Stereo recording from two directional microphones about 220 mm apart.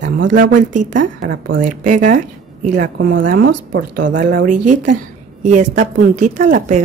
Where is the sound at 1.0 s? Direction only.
55° right (ahead or behind).